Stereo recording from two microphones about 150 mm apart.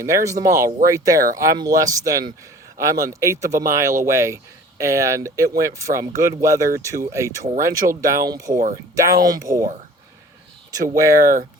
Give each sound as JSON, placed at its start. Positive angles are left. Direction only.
{"t": 0.0, "sound": "speech", "side_deg": -20}
{"t": 10.9, "sound": "speech", "side_deg": -20}